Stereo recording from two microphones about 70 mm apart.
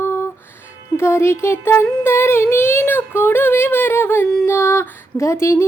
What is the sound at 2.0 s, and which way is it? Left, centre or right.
Child singing, left.